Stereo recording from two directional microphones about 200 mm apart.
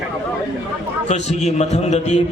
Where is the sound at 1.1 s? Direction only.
35° left (ahead or behind).